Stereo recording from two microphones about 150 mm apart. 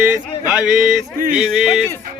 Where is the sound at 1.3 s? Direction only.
5° right (ahead or behind).